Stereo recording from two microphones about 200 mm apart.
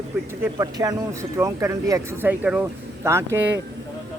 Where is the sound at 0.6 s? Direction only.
20° right (ahead or behind).